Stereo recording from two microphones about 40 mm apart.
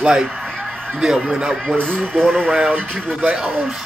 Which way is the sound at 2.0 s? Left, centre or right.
Right.